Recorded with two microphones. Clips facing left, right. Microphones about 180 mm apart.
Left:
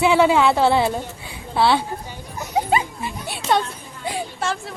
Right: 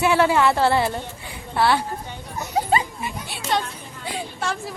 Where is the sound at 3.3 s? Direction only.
55° left (ahead or behind).